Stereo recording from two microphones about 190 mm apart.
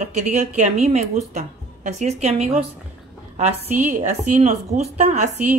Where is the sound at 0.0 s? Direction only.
40° right (ahead or behind).